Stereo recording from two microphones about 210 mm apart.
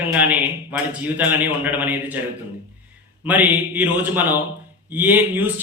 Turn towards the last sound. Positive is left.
turn(degrees=-10)  # may be behind; listen again after turning